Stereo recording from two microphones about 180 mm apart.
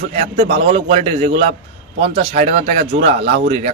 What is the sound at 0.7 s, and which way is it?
Speech, 35° right (ahead or behind).